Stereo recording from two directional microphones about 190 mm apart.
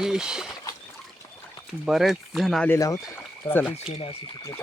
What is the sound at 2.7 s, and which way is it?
Speech, 15° left (ahead or behind).